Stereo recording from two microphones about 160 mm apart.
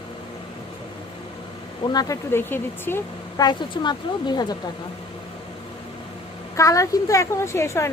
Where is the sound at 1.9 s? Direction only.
25° left (ahead or behind).